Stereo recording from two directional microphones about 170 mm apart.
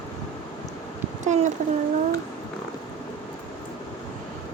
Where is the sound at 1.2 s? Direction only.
45° right (ahead or behind).